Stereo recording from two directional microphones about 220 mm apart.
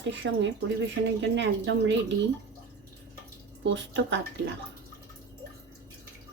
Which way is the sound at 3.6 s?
55° right (ahead or behind).